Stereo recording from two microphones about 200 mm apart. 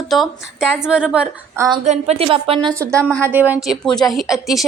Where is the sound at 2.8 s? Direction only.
15° right (ahead or behind).